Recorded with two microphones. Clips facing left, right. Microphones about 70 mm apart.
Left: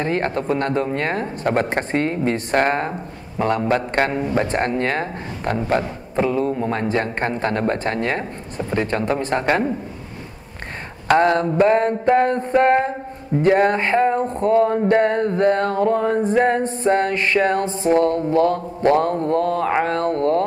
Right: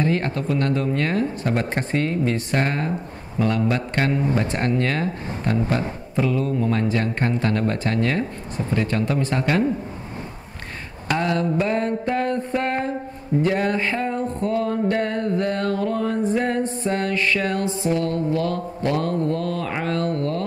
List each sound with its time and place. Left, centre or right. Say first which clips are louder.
0.0 s music: left 1 dB; left
11.1 s music: left 6 dB; left